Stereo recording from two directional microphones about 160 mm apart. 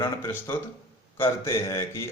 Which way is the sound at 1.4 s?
15° left (ahead or behind).